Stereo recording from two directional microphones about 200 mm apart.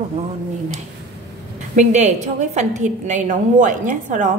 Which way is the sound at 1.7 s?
35° right (ahead or behind).